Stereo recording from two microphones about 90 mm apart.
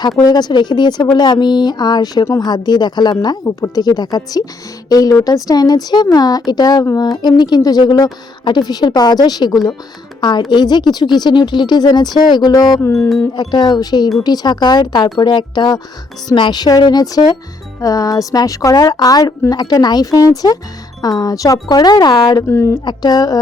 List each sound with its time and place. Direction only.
0.2 s a woman's voice: 50° left (ahead or behind)
12.8 s speech: 35° left (ahead or behind)
13.3 s speech: 55° left (ahead or behind)
22.4 s speech: 30° left (ahead or behind)
22.8 s speech: 50° left (ahead or behind)